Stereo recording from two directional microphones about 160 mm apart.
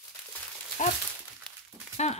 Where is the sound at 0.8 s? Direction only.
45° left (ahead or behind).